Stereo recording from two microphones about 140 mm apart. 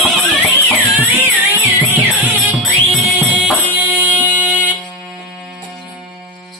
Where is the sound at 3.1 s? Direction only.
Centre (ahead or behind).